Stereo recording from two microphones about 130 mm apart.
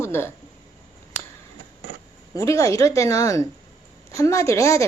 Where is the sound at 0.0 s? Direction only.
20° left (ahead or behind).